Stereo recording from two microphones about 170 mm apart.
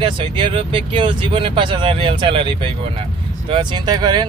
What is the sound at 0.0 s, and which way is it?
Speech, 30° right (ahead or behind).